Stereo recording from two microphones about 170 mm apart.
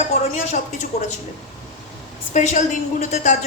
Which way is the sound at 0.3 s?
45° left (ahead or behind).